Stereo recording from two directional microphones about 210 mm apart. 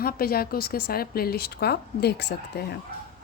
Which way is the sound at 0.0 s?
45° left (ahead or behind).